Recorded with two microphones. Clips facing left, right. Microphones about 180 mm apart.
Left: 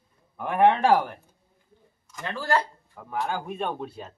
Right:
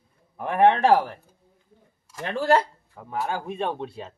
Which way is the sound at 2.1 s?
25° right (ahead or behind).